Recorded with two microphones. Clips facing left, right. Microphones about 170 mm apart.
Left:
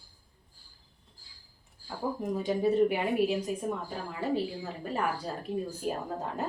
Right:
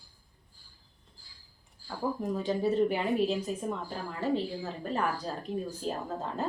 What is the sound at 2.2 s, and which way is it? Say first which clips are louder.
Speech: left 2 dB; 15° left (ahead or behind).